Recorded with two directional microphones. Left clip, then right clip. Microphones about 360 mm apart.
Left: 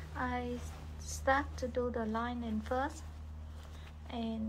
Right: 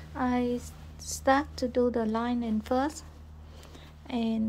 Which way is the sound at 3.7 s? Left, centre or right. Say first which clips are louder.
Right 9 dB; right.